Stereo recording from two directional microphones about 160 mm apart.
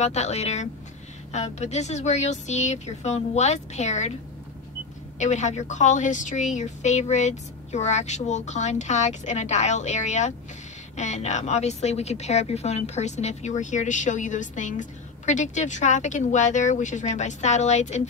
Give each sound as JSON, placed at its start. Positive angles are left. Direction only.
{"t": 0.0, "sound": "a woman's voice", "side_deg": 45}
{"t": 5.2, "sound": "a woman's voice", "side_deg": 45}